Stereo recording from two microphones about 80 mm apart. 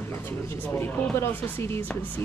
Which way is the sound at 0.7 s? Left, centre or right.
Left.